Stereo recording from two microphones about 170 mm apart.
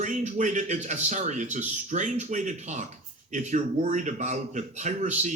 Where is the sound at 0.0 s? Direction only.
45° right (ahead or behind).